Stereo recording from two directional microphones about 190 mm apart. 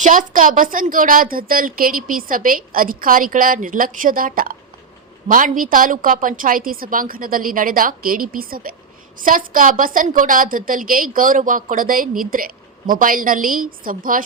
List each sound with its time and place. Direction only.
0.0 s a woman's voice: 45° right (ahead or behind)